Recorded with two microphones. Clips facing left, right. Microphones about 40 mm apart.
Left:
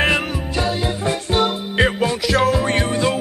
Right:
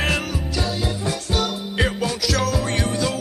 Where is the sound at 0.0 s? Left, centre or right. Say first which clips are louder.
Left 5 dB; left.